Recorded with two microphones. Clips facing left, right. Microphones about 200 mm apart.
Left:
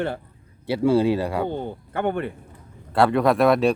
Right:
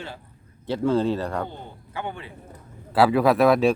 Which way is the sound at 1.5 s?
55° left (ahead or behind).